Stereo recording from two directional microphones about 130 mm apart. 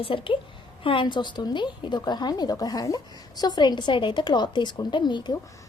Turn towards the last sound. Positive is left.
turn(degrees=35)  # may be behind; listen again after turning